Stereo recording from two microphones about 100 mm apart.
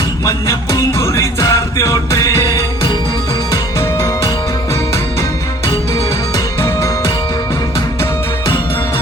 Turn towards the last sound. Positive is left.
turn(degrees=35)  # may be behind; listen again after turning